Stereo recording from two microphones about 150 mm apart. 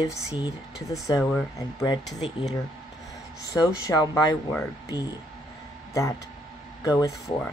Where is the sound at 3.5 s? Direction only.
25° left (ahead or behind).